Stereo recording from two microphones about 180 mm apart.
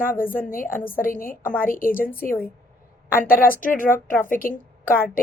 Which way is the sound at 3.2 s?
50° left (ahead or behind).